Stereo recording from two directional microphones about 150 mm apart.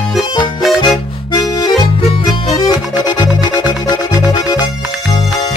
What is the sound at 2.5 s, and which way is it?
Music, 25° left (ahead or behind).